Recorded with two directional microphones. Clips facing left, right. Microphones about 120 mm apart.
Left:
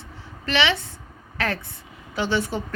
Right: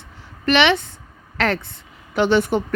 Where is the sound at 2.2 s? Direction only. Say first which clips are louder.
Right 7 dB; 60° right (ahead or behind).